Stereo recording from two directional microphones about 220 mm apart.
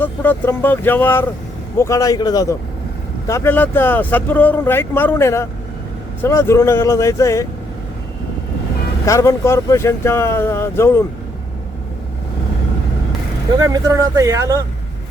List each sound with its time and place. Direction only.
0.0 s speech: 10° left (ahead or behind)
9.0 s speech: 15° left (ahead or behind)
13.6 s speech: 15° right (ahead or behind)